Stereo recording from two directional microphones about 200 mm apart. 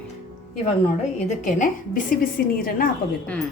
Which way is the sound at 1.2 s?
40° left (ahead or behind).